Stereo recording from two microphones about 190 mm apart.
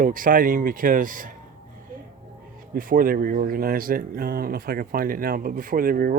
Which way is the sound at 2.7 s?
45° right (ahead or behind).